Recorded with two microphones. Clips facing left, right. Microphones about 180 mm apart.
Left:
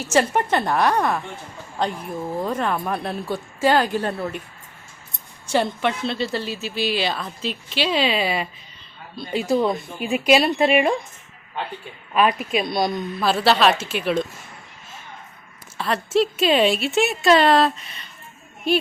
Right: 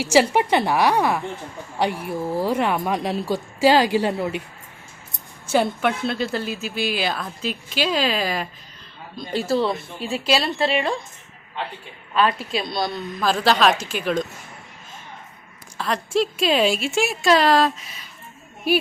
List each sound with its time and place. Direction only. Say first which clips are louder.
0.0 s speech: right 2 dB; 10° right (ahead or behind)
5.5 s a woman's voice: right 1 dB; 5° right (ahead or behind)
10.0 s a woman's voice: left 5 dB; 15° left (ahead or behind)
12.1 s a woman's voice: left 2 dB; 15° left (ahead or behind)
13.1 s a woman's voice: even; 5° left (ahead or behind)
15.8 s a woman's voice: left 2 dB; centre (ahead or behind)